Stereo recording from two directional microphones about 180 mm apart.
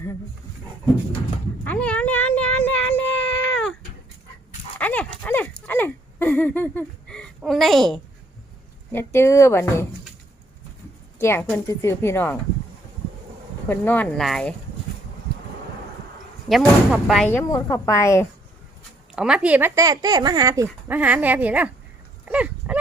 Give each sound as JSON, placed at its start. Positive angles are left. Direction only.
{"t": 1.6, "sound": "a sound", "side_deg": 10}
{"t": 4.8, "sound": "a sound", "side_deg": 10}
{"t": 8.9, "sound": "speech", "side_deg": 15}
{"t": 11.2, "sound": "speech", "side_deg": 10}
{"t": 13.7, "sound": "speech", "side_deg": 10}
{"t": 16.5, "sound": "speech", "side_deg": 0}
{"t": 17.2, "sound": "speech", "side_deg": 15}
{"t": 19.1, "sound": "speech", "side_deg": -5}
{"t": 22.3, "sound": "livestock", "side_deg": -5}